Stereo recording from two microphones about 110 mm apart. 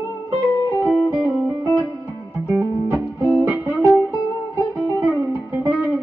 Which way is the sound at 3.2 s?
30° right (ahead or behind).